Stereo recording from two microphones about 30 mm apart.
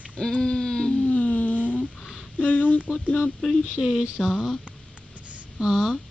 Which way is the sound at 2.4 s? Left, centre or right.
Left.